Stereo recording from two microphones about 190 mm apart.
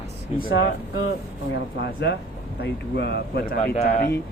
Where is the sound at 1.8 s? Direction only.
65° left (ahead or behind).